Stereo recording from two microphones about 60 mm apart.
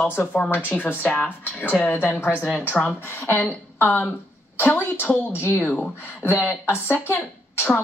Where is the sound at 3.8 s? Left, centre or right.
Left.